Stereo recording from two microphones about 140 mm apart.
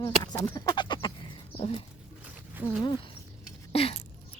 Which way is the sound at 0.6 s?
30° left (ahead or behind).